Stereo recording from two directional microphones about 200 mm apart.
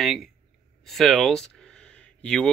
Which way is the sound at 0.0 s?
Centre (ahead or behind).